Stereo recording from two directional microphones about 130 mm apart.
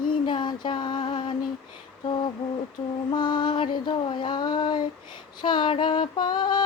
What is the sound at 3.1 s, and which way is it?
Female singing, 35° left (ahead or behind).